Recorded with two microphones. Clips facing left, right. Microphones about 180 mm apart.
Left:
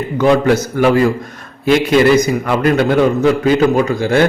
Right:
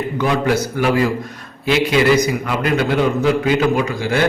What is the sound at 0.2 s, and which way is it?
A man's voice, 45° left (ahead or behind).